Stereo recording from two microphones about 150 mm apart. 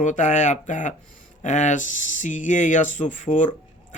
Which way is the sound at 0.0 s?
55° left (ahead or behind).